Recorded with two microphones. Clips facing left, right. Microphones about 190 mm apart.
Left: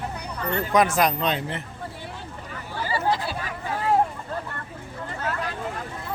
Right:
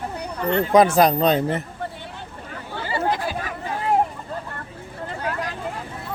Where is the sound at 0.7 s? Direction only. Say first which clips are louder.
Right 5 dB; 30° right (ahead or behind).